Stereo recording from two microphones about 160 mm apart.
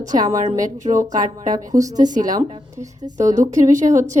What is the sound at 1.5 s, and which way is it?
A woman's voice, 20° right (ahead or behind).